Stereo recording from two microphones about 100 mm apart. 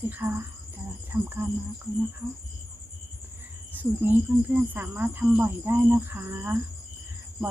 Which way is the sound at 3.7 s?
20° right (ahead or behind).